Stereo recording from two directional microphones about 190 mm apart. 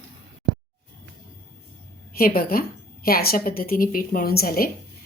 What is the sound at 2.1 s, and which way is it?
A woman's voice, 50° left (ahead or behind).